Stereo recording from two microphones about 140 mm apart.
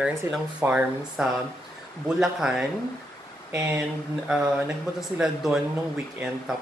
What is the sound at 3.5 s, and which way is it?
Speech, 20° right (ahead or behind).